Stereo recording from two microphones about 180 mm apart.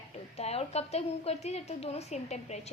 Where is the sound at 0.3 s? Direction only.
35° left (ahead or behind).